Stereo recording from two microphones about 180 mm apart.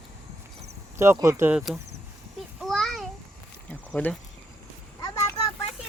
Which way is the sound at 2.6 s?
Centre (ahead or behind).